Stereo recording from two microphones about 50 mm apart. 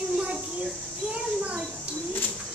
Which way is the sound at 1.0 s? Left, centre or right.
Right.